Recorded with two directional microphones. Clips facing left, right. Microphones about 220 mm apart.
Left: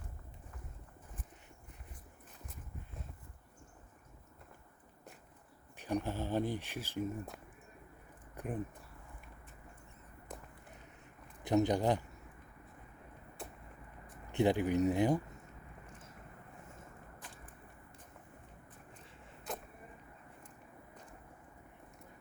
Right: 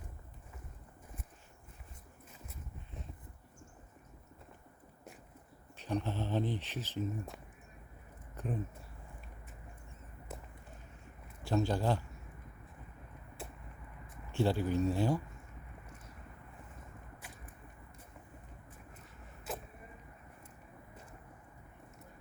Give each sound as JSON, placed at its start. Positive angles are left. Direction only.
{"t": 5.7, "sound": "speech", "side_deg": 15}
{"t": 8.4, "sound": "speech", "side_deg": 15}
{"t": 11.4, "sound": "speech", "side_deg": 20}
{"t": 14.3, "sound": "speech", "side_deg": 15}
{"t": 17.2, "sound": "a sound", "side_deg": -10}
{"t": 19.5, "sound": "vehicle", "side_deg": -5}